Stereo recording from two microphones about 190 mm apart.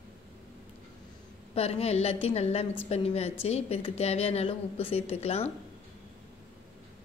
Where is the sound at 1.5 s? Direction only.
30° left (ahead or behind).